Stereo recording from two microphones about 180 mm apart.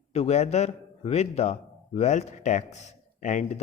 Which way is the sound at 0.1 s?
35° left (ahead or behind).